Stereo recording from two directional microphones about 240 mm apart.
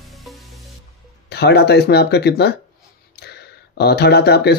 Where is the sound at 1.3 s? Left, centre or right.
Left.